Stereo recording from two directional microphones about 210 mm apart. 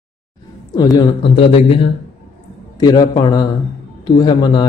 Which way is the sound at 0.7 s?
20° left (ahead or behind).